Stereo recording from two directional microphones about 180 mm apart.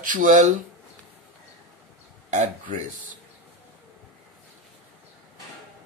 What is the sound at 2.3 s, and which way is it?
Speech, 45° right (ahead or behind).